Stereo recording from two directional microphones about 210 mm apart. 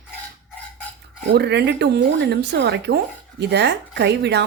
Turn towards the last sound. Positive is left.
turn(degrees=-55)  # may be behind; listen again after turning